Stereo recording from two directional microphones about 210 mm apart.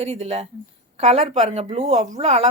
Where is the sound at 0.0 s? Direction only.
30° right (ahead or behind).